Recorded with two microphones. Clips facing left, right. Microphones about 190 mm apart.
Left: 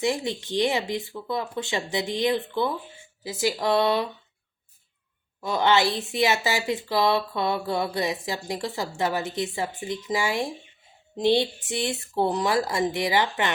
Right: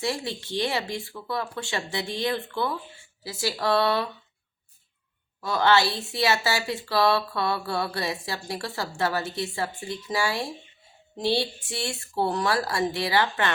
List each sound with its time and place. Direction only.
0.0 s a woman's voice: 20° left (ahead or behind)
5.4 s a woman's voice: 20° left (ahead or behind)